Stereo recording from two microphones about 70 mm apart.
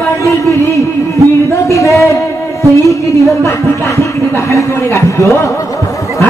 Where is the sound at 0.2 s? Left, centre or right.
Left.